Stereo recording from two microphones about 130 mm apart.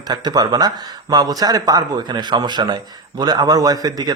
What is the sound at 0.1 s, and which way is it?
A man's voice, 30° right (ahead or behind).